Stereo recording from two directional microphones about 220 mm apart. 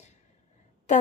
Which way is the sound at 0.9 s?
35° left (ahead or behind).